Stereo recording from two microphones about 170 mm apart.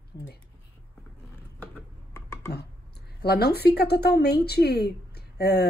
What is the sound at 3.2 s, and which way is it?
A woman's voice, 70° left (ahead or behind).